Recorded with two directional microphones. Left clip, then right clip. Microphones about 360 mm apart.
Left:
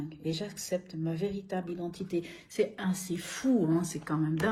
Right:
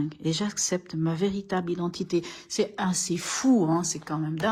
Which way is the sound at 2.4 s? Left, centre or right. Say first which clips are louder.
Right 4 dB; centre.